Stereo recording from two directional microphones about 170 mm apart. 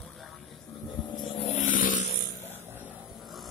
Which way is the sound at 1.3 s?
45° left (ahead or behind).